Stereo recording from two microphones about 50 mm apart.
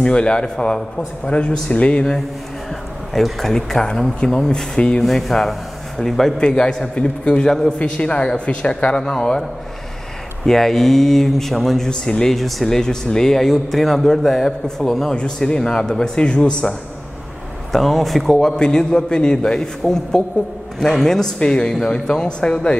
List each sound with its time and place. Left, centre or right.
0.0 s a man's voice: centre
3.1 s a man's voice: centre
5.0 s a man's voice: centre
10.4 s a man's voice: centre
12.4 s a man's voice: centre
17.7 s a man's voice: centre